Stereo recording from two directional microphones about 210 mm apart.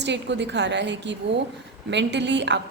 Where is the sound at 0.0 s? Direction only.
55° right (ahead or behind).